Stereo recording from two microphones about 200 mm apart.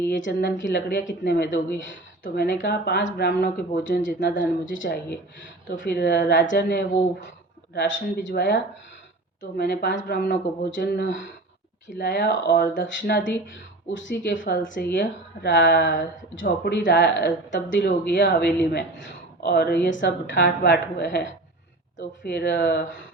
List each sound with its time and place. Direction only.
0.2 s speech: 65° left (ahead or behind); by 4.0 s 50° left (ahead or behind)
4.0 s a woman's voice: 65° left (ahead or behind)
8.1 s speech: 50° left (ahead or behind); by 23.0 s 65° left (ahead or behind)